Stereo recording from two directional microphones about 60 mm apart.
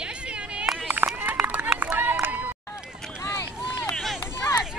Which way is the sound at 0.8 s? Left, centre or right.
Right.